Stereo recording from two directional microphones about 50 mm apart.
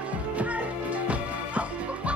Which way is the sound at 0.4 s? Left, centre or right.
Right.